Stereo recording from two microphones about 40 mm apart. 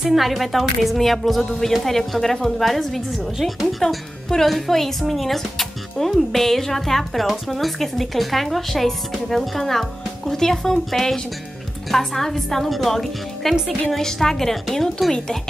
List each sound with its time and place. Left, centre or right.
0.0 s a woman's voice: centre